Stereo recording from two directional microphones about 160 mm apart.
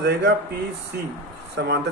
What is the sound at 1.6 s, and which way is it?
Speech, 90° right.